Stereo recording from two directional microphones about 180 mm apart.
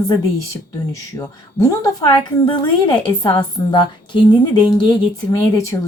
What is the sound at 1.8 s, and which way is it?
A woman's voice, 20° left (ahead or behind).